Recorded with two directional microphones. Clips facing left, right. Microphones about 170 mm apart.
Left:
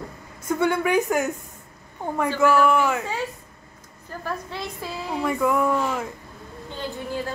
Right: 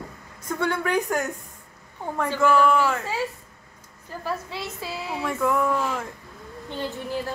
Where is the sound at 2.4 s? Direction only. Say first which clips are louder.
Even; 5° left (ahead or behind).